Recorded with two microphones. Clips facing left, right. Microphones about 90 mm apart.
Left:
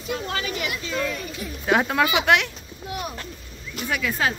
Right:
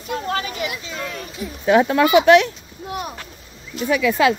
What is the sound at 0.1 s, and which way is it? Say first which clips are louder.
Speech: right 3 dB; 40° right (ahead or behind).